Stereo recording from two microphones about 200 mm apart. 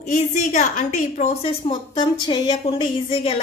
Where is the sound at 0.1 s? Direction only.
35° left (ahead or behind).